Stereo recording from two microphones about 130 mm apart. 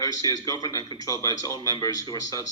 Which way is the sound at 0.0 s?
25° left (ahead or behind).